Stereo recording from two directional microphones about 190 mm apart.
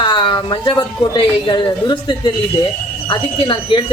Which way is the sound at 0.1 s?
25° left (ahead or behind).